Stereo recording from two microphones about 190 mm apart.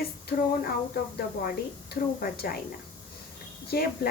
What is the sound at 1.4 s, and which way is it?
A woman's voice, 50° left (ahead or behind).